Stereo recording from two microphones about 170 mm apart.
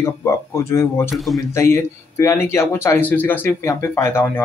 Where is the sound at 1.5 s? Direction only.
15° left (ahead or behind).